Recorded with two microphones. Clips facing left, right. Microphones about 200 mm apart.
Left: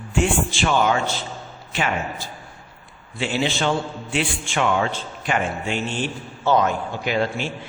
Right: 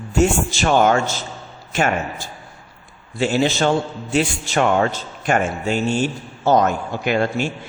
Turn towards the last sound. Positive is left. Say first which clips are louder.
# right 3 dB
turn(degrees=-50)  # may be behind; listen again after turning